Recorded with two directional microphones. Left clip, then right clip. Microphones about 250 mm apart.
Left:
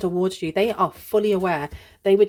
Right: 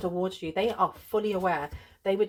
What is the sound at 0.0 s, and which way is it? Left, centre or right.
Speech, left.